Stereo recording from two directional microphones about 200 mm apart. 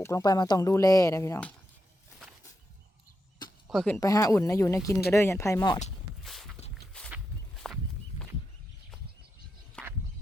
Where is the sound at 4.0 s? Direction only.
15° left (ahead or behind).